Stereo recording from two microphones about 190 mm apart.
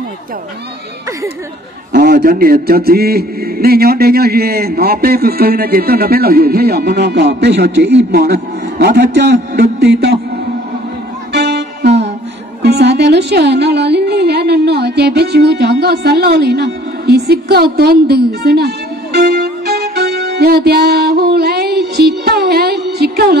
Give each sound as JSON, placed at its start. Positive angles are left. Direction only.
{"t": 1.9, "sound": "a man's voice", "side_deg": -60}
{"t": 11.3, "sound": "music", "side_deg": -60}
{"t": 12.6, "sound": "a man's voice", "side_deg": -60}
{"t": 19.1, "sound": "music", "side_deg": -60}